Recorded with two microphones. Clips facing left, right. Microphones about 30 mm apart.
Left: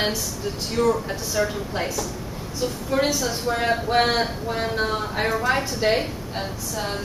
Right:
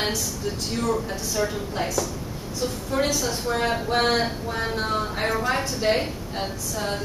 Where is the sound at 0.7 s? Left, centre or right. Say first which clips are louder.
Left 6 dB; centre.